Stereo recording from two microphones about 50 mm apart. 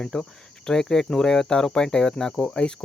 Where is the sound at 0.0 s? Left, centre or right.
Centre.